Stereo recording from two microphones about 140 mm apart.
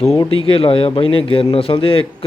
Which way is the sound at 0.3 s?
40° left (ahead or behind).